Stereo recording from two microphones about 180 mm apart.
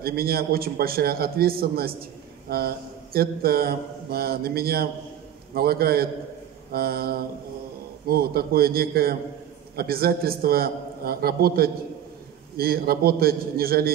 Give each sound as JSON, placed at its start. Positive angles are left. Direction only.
{"t": 0.0, "sound": "mantra", "side_deg": -55}